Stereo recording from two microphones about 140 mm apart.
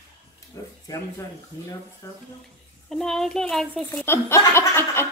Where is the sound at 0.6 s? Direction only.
20° left (ahead or behind).